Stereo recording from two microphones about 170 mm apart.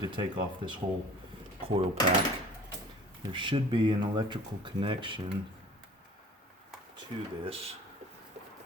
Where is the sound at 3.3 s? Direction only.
30° right (ahead or behind).